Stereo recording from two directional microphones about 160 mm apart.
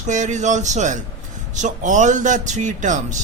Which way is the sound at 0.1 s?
50° right (ahead or behind).